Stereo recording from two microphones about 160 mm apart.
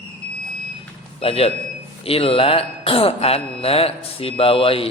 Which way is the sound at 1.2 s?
40° left (ahead or behind).